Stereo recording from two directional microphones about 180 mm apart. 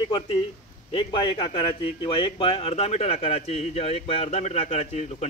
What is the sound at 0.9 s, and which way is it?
Speech, 25° left (ahead or behind).